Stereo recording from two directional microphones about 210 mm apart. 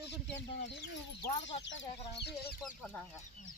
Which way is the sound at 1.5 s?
60° left (ahead or behind).